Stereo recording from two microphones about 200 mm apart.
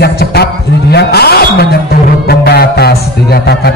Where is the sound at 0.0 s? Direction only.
55° left (ahead or behind).